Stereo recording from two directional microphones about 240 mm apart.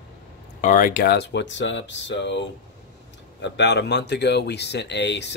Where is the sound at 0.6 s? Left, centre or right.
Left.